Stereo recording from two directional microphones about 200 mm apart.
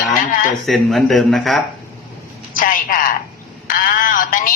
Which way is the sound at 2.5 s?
45° left (ahead or behind).